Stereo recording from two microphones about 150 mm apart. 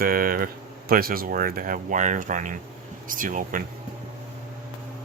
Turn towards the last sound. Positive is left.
turn(degrees=-60)  # may be behind; listen again after turning